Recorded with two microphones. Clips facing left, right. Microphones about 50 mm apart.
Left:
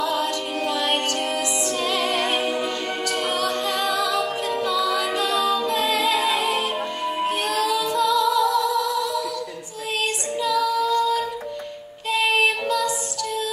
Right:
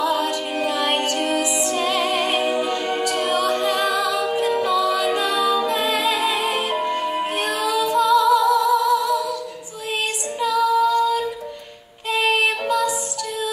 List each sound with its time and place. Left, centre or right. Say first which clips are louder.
0.0 s music: right 2 dB; centre
3.3 s a capella: right 4 dB; right
4.6 s music: right 3 dB; centre
7.5 s female singing: right 4 dB; centre
8.1 s music: right 5 dB; centre
8.5 s music: right 5 dB; right
10.4 s female singing: right 4 dB; centre
12.1 s music: right 1 dB; centre